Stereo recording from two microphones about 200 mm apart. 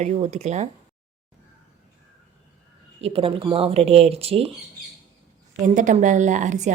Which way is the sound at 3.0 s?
30° right (ahead or behind).